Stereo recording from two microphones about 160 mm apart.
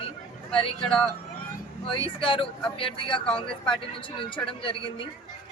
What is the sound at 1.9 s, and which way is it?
Speech, 30° left (ahead or behind).